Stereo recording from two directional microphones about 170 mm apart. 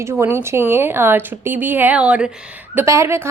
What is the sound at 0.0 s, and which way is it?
A woman's voice, 15° right (ahead or behind).